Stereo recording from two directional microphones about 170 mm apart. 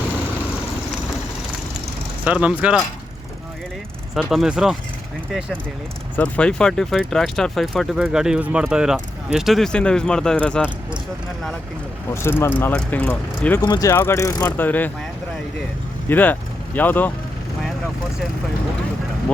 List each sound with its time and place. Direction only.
2.2 s speech: 5° right (ahead or behind)
4.1 s speech: centre (ahead or behind)
12.1 s speech: 15° left (ahead or behind)
13.6 s speech: 20° left (ahead or behind)
16.0 s speech: 10° left (ahead or behind)